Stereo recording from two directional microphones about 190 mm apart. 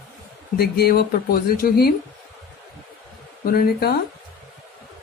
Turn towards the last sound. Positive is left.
turn(degrees=50)  # may be behind; listen again after turning